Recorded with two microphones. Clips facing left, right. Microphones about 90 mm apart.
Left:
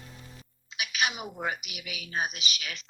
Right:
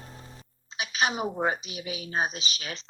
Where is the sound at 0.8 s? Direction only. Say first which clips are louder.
Right 4 dB; 35° right (ahead or behind).